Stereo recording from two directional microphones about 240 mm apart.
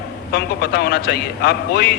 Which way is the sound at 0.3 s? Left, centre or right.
Left.